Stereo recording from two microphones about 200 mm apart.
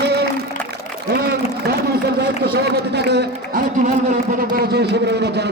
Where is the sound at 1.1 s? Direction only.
50° right (ahead or behind).